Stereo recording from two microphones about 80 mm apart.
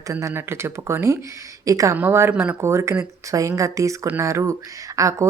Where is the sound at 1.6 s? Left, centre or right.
Right.